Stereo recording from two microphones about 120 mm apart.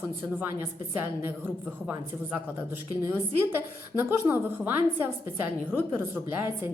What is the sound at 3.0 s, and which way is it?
A woman's voice, 20° right (ahead or behind).